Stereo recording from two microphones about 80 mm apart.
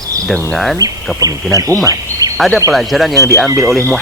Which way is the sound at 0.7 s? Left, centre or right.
Right.